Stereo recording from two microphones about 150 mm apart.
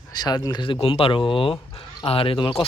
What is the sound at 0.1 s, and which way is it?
Speech, 25° left (ahead or behind).